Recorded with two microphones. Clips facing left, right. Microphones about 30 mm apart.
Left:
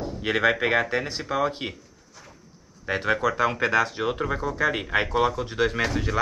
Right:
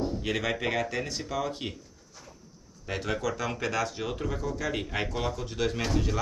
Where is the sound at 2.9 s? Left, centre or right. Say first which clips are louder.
Left 7 dB; left.